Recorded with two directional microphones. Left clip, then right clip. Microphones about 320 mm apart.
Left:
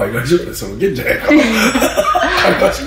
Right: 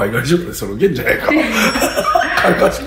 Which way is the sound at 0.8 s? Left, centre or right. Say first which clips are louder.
Right 1 dB; centre.